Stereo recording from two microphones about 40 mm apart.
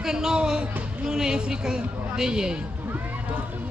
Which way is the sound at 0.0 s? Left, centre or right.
Centre.